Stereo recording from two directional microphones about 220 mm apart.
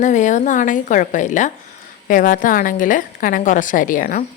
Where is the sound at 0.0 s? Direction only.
35° left (ahead or behind).